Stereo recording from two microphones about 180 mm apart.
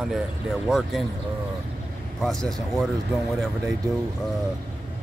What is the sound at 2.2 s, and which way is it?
Speech, 5° left (ahead or behind).